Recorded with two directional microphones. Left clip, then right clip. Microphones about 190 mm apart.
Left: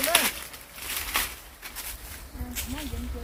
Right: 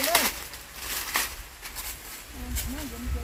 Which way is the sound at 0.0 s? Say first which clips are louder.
Even; 25° right (ahead or behind).